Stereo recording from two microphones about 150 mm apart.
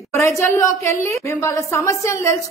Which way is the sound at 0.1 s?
20° left (ahead or behind).